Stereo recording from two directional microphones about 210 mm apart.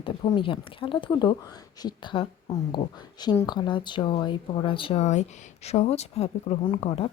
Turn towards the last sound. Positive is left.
turn(degrees=30)  # may be behind; listen again after turning